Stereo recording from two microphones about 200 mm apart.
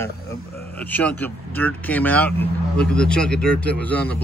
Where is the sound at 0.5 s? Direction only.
50° left (ahead or behind).